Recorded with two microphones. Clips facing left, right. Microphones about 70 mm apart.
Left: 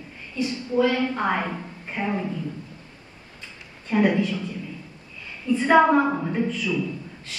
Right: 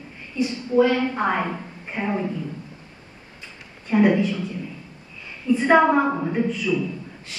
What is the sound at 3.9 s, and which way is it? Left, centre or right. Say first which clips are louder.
Speech: right 3 dB; centre.